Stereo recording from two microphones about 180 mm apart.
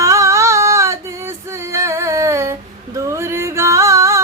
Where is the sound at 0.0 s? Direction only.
15° right (ahead or behind).